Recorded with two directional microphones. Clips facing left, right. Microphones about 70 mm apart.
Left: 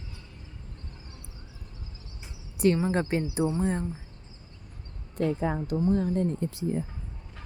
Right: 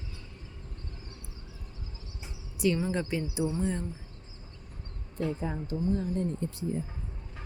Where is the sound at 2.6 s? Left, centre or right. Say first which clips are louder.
Left 4 dB; left.